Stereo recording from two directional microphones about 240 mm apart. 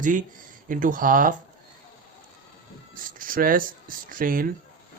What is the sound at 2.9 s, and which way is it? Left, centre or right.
Speech, right.